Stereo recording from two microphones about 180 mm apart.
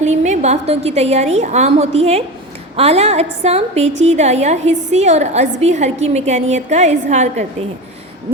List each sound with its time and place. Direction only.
0.0 s a woman's voice: 40° right (ahead or behind)